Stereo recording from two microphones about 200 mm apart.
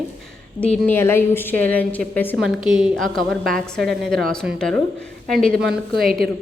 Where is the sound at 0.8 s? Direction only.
10° left (ahead or behind).